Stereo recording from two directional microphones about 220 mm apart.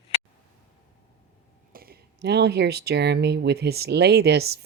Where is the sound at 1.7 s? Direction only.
45° right (ahead or behind).